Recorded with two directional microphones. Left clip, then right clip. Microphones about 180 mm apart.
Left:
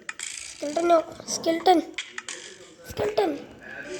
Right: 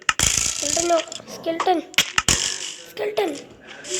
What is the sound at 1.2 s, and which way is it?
Speech, 10° left (ahead or behind).